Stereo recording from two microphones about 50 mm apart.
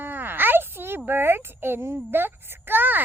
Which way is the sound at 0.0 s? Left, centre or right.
Right.